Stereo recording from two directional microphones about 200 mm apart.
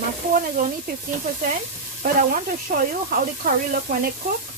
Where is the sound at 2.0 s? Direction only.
45° right (ahead or behind).